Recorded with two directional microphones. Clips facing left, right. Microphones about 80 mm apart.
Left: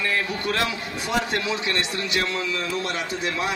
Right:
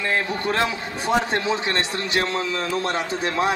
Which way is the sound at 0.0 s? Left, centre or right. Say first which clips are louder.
Right 2 dB; right.